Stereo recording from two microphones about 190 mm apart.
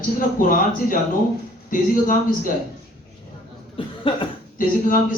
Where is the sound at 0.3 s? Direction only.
45° left (ahead or behind).